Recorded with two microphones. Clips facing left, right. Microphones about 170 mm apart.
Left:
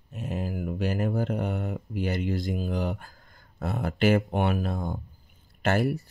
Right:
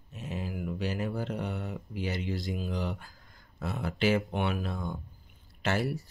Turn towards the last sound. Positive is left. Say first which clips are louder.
# left 5 dB
turn(degrees=50)  # may be behind; listen again after turning